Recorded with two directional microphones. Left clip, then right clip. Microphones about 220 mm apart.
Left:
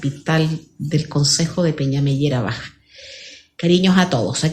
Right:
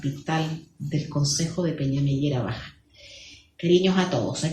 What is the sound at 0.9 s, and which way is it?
Speech, 50° left (ahead or behind).